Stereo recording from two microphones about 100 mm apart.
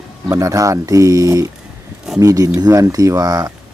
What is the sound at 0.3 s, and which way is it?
Speech, 35° right (ahead or behind).